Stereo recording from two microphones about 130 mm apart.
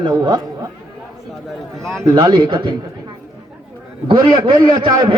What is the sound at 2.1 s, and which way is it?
Speech, 35° right (ahead or behind).